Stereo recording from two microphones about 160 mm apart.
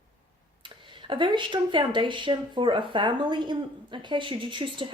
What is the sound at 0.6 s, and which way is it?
Speech, 30° right (ahead or behind).